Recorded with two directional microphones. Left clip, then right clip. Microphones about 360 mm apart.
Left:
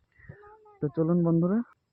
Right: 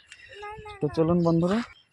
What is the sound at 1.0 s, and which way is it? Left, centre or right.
Speech, centre.